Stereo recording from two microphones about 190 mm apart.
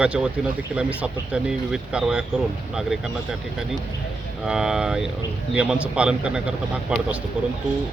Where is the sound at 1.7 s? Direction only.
5° right (ahead or behind).